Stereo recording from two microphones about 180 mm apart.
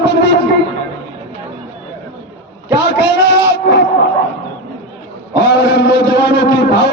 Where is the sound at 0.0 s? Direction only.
70° left (ahead or behind).